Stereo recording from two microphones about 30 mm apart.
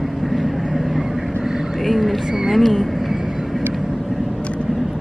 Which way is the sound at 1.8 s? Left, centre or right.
Centre.